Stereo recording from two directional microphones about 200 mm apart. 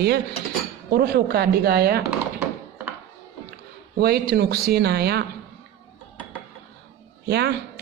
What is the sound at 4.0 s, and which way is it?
Speech, 50° right (ahead or behind).